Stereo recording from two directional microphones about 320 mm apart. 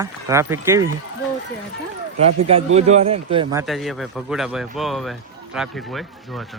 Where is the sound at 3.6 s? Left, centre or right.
Centre.